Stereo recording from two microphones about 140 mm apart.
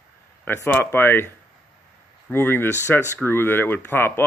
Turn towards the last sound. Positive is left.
turn(degrees=15)  # may be behind; listen again after turning